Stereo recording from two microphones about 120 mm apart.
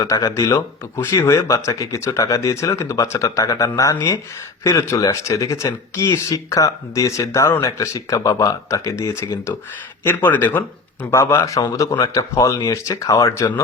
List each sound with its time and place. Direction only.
0.0 s speech: 30° left (ahead or behind)